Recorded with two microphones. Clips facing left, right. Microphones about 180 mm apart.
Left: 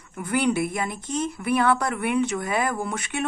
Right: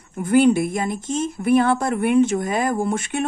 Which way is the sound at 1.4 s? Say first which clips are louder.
Right 9 dB; 35° right (ahead or behind).